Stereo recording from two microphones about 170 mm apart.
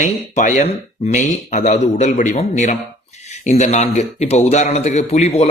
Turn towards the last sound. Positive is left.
turn(degrees=40)  # may be behind; listen again after turning